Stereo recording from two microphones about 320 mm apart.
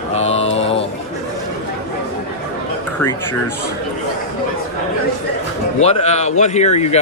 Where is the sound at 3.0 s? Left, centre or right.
Centre.